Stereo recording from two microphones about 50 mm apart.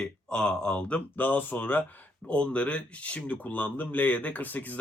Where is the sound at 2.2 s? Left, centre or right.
Left.